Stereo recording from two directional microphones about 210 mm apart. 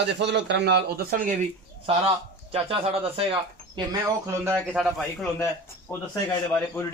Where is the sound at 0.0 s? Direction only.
55° right (ahead or behind).